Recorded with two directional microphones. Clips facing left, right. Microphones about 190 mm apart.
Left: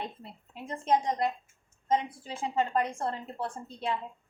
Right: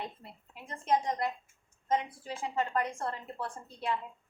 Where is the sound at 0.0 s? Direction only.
25° left (ahead or behind).